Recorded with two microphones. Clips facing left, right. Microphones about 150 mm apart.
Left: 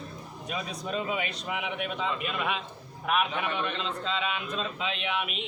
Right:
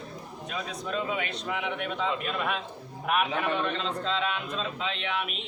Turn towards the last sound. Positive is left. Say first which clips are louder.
# even
turn(degrees=5)  # may be behind; listen again after turning